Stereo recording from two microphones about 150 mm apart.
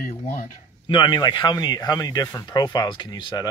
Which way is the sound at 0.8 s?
30° left (ahead or behind).